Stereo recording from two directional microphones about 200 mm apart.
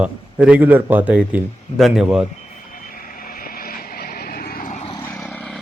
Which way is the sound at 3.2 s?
45° left (ahead or behind).